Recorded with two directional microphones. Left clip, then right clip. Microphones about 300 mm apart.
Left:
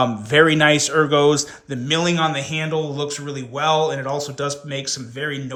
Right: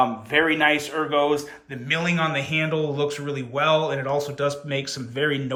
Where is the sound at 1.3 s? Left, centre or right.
Left.